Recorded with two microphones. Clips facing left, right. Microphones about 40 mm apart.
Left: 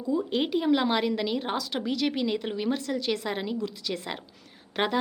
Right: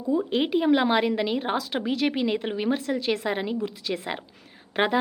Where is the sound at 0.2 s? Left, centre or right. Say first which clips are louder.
Right 3 dB; centre.